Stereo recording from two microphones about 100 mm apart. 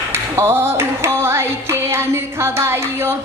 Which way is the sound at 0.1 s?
25° right (ahead or behind).